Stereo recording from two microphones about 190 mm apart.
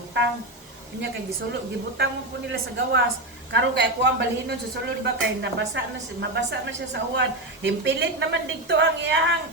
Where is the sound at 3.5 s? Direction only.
70° right (ahead or behind).